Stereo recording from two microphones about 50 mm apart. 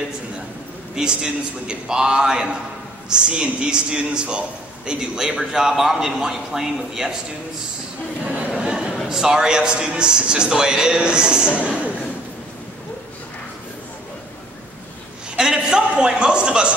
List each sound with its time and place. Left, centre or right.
0.9 s a man's voice: centre
8.5 s a sound: centre
9.1 s a man's voice: centre
15.3 s a man's voice: centre